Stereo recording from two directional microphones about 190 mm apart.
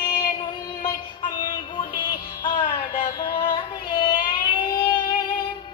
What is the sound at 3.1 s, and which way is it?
Child singing, 20° left (ahead or behind).